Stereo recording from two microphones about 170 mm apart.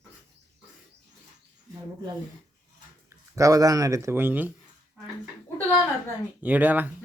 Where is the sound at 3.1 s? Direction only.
20° right (ahead or behind).